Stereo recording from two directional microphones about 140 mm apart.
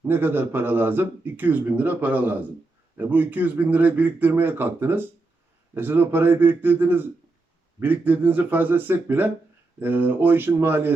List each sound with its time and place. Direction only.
0.1 s speech: 15° right (ahead or behind)